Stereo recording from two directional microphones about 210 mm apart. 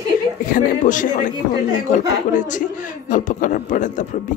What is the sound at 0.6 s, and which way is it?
A man's voice, 40° left (ahead or behind).